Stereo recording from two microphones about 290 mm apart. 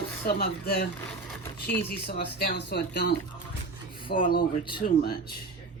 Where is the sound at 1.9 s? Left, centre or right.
Left.